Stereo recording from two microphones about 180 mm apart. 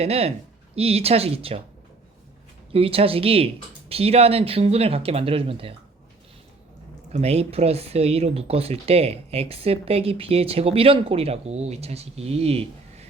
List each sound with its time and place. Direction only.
0.0 s speech: 35° right (ahead or behind)
2.7 s speech: 30° right (ahead or behind)
7.1 s speech: 35° right (ahead or behind)